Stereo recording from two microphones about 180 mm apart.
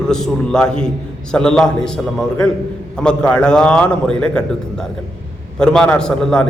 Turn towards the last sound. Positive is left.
turn(degrees=5)  # may be behind; listen again after turning